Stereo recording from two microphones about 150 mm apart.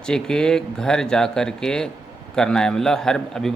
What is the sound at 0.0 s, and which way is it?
A man's voice, 5° left (ahead or behind).